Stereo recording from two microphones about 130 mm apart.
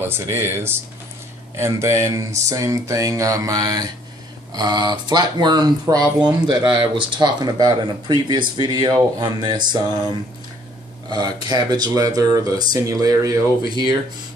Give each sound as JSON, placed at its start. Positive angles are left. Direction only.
{"t": 0.0, "sound": "speech", "side_deg": -20}